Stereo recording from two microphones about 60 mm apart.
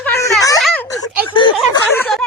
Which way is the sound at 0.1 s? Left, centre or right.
Left.